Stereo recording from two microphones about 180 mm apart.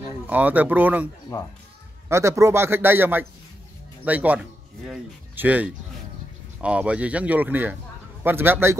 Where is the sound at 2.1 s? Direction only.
15° right (ahead or behind).